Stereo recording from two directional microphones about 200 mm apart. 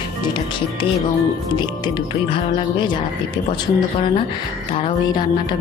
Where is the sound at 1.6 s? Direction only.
25° left (ahead or behind).